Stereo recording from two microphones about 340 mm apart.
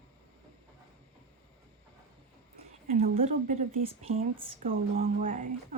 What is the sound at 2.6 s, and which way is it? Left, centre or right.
A woman's voice, right.